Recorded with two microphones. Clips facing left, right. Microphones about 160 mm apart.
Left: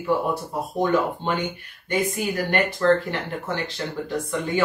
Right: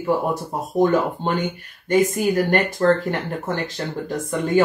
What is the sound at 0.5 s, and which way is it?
Speech, 45° right (ahead or behind).